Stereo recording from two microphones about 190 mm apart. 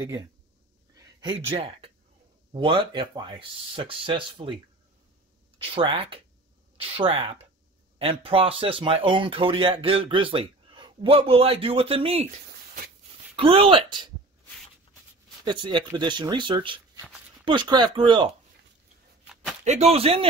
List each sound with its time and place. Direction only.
0.9 s speech: 20° right (ahead or behind)
5.6 s speech: 25° right (ahead or behind)
13.4 s speech: 30° right (ahead or behind)
15.4 s speech: 25° right (ahead or behind)
19.6 s speech: 35° right (ahead or behind)